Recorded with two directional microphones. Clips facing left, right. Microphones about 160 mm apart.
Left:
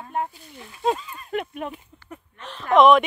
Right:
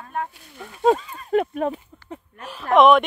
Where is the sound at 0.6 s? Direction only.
50° right (ahead or behind).